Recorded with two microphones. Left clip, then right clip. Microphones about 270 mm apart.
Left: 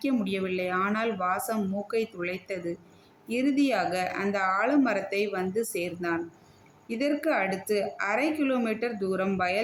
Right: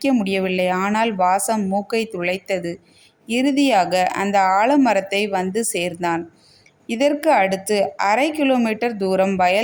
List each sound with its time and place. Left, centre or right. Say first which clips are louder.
0.0 s speech: right 10 dB; right